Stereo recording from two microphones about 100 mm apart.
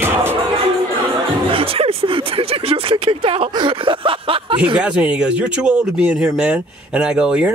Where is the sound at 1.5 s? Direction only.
65° right (ahead or behind).